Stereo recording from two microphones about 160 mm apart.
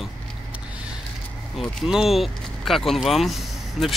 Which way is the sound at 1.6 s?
Centre (ahead or behind).